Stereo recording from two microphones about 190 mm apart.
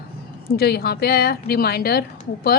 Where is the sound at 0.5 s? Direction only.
55° left (ahead or behind).